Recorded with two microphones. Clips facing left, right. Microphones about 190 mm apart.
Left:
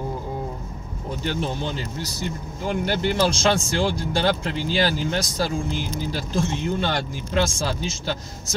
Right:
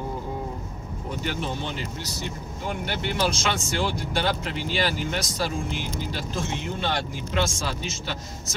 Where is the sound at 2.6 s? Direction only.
35° left (ahead or behind).